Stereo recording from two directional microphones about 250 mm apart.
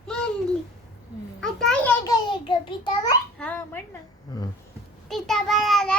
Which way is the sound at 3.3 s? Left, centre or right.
Centre.